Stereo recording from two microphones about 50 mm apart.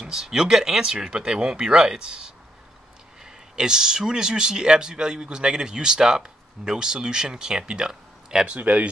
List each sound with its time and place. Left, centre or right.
0.0 s speech: centre
3.5 s speech: centre
8.5 s speech: right